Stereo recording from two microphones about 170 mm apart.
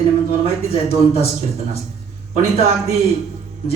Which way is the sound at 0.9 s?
35° left (ahead or behind).